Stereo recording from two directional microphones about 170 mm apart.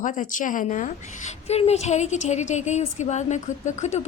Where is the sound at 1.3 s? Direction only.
40° left (ahead or behind).